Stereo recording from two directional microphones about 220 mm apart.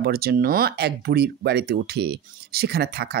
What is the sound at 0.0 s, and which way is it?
Speech, 45° right (ahead or behind).